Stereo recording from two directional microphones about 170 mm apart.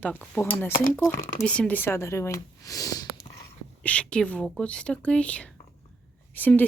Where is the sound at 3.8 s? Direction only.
5° left (ahead or behind).